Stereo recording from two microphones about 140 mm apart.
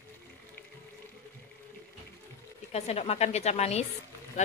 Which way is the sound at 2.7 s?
50° left (ahead or behind).